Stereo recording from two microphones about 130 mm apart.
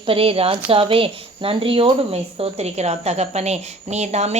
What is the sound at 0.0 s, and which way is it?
A woman's voice, 45° right (ahead or behind).